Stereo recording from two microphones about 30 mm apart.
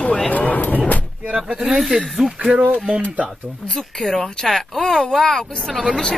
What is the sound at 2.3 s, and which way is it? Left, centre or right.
Speech, right.